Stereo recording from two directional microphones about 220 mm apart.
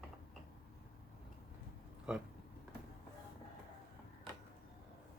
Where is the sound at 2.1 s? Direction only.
5° right (ahead or behind).